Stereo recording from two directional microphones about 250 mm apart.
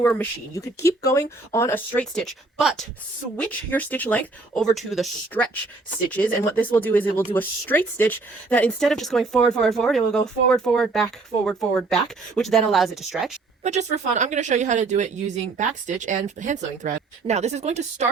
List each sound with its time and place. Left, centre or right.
0.0 s speech: centre
13.6 s speech: right